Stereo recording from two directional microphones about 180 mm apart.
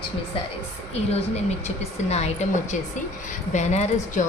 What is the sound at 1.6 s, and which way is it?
A woman's voice, 35° left (ahead or behind).